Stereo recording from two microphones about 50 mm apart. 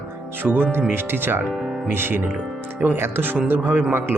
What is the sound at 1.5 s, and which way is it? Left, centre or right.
Speech, centre.